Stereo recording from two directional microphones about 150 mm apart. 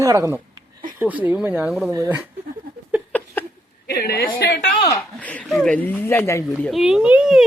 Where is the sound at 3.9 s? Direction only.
90° left.